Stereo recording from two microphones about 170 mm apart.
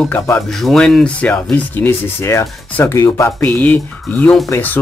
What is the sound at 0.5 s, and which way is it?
Speech, centre (ahead or behind).